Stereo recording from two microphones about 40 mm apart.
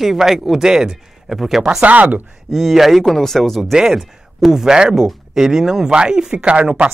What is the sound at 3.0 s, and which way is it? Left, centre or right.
Speech, centre.